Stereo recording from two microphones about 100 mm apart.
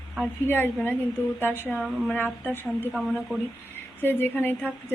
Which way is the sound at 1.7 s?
Centre (ahead or behind).